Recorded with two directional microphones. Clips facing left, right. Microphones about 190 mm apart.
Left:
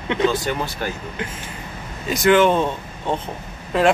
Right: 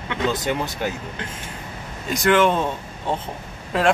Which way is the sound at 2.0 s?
Centre (ahead or behind).